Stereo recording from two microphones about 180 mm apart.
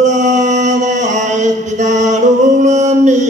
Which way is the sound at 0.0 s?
40° right (ahead or behind).